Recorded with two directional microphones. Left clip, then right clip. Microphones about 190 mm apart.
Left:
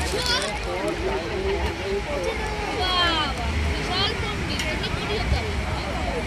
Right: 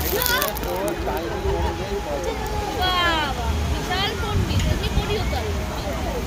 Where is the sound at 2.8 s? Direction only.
50° right (ahead or behind).